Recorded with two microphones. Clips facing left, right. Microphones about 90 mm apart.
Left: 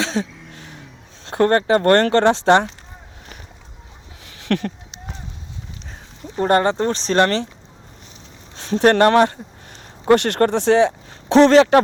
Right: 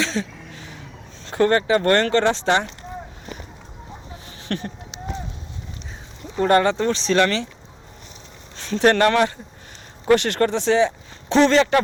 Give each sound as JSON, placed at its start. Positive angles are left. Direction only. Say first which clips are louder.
{"t": 0.0, "sound": "a sound", "louder": "left 2 dB", "side_deg": 60}
{"t": 1.3, "sound": "speech", "louder": "left 2 dB", "side_deg": 50}
{"t": 4.4, "sound": "speech", "louder": "left 6 dB", "side_deg": 65}
{"t": 6.3, "sound": "speech", "louder": "even", "side_deg": 35}
{"t": 8.5, "sound": "speech", "louder": "left 3 dB", "side_deg": 50}